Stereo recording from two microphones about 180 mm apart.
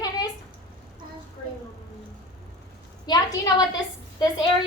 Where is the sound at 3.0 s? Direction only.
20° left (ahead or behind).